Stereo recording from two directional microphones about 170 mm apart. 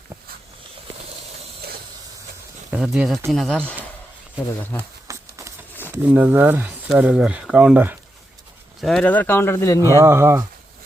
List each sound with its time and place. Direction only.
2.6 s speech: 5° right (ahead or behind)
5.0 s a sound: 20° right (ahead or behind)
5.9 s speech: 10° right (ahead or behind)
8.8 s speech: centre (ahead or behind)
10.0 s speech: 15° right (ahead or behind)